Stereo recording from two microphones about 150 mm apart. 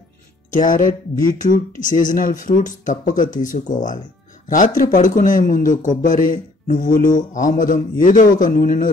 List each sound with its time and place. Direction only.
0.5 s speech: 60° left (ahead or behind)